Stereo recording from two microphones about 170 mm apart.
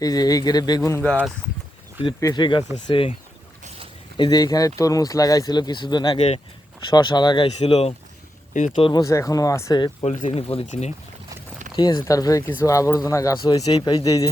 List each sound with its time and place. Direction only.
0.0 s speech: 20° left (ahead or behind)
0.9 s speech: 15° left (ahead or behind)
2.2 s speech: 25° left (ahead or behind)
4.2 s speech: 25° left (ahead or behind)
6.1 s speech: 40° left (ahead or behind)
6.9 s speech: 25° left (ahead or behind); by 8.8 s 45° left (ahead or behind)
8.8 s speech: 25° left (ahead or behind)
10.1 s speech: 45° left (ahead or behind)
11.8 s speech: 30° left (ahead or behind)